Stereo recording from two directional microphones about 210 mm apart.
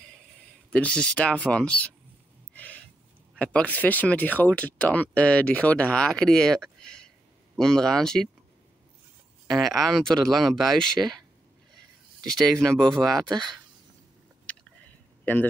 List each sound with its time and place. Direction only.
0.7 s speech: 5° left (ahead or behind)
2.5 s snort: 5° left (ahead or behind)
3.3 s speech: 5° left (ahead or behind)
9.5 s speech: centre (ahead or behind)
12.3 s speech: 5° left (ahead or behind)
13.3 s speech: 20° right (ahead or behind)
14.4 s a sound: 5° left (ahead or behind)